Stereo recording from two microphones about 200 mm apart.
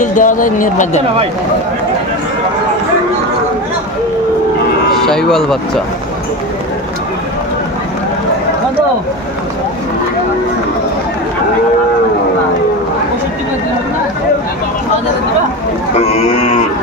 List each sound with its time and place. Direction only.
0.0 s speech: 40° left (ahead or behind)
5.0 s speech: centre (ahead or behind)
15.9 s speech: 35° left (ahead or behind)